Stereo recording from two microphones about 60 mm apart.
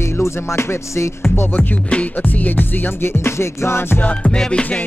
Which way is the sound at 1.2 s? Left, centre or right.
Left.